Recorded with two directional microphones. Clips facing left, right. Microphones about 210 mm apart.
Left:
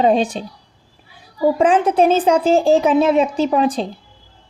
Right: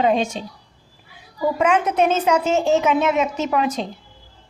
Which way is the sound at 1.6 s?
30° left (ahead or behind).